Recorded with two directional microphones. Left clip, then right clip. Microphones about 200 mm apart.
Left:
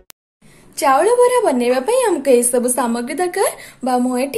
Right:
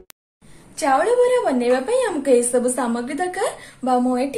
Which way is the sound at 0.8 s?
45° left (ahead or behind).